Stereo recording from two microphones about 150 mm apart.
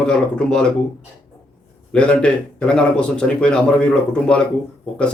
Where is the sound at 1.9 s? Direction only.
5° left (ahead or behind).